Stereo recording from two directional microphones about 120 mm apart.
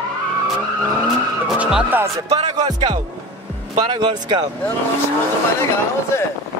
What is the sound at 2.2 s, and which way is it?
Music, 60° right (ahead or behind).